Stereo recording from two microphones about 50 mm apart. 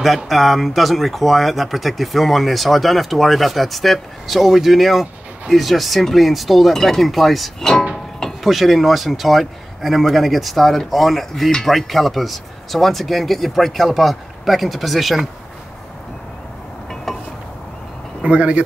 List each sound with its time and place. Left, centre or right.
0.0 s speech: centre
16.9 s a sound: centre
18.2 s speech: right